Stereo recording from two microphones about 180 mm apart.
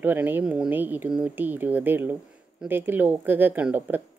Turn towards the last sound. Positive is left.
turn(degrees=-10)  # may be behind; listen again after turning